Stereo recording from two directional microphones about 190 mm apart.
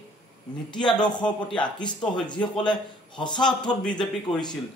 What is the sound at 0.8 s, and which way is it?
Speech, 25° left (ahead or behind).